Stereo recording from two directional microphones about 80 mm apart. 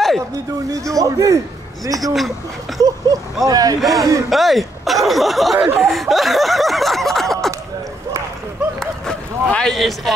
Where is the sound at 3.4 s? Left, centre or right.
Right.